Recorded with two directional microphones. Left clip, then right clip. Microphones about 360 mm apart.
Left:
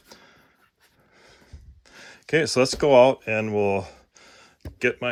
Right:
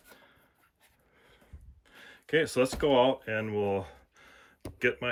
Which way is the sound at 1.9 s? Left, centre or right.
Centre.